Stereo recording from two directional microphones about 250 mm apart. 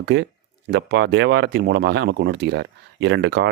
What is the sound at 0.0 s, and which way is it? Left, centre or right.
Speech, right.